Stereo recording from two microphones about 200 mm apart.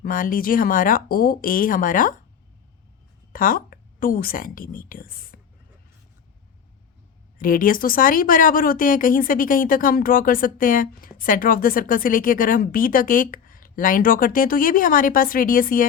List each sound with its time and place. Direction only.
0.0 s speech: 45° left (ahead or behind)
3.3 s a woman's voice: 45° left (ahead or behind)
7.3 s speech: 45° left (ahead or behind)